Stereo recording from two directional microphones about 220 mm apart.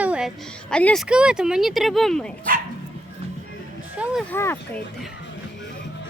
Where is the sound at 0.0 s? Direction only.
5° right (ahead or behind).